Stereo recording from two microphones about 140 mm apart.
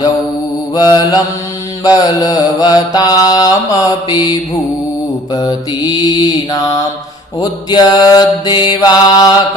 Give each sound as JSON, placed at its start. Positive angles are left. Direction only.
{"t": 0.7, "sound": "mantra", "side_deg": 30}